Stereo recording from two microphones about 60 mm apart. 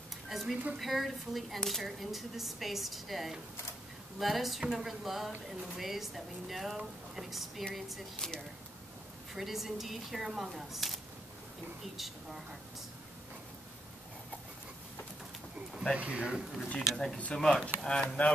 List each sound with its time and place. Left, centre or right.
0.3 s a woman's voice: centre
9.3 s speech: centre
15.7 s a sound: centre
16.0 s speech: right
16.9 s speech: centre